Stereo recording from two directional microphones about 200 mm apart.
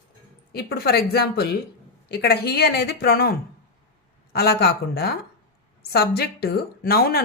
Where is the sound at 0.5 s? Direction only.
50° left (ahead or behind).